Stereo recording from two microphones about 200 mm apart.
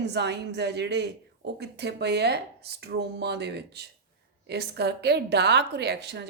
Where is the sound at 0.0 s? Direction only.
60° right (ahead or behind).